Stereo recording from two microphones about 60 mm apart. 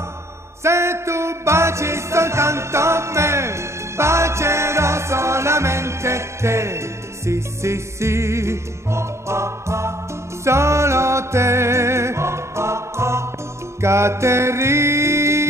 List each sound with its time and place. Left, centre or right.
0.7 s music: right